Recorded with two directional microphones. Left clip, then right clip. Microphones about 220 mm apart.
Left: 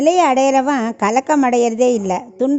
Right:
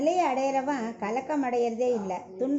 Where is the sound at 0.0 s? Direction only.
55° left (ahead or behind).